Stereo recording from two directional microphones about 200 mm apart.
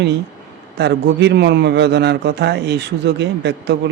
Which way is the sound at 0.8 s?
60° right (ahead or behind).